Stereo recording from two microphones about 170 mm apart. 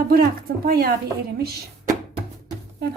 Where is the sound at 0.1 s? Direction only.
60° right (ahead or behind).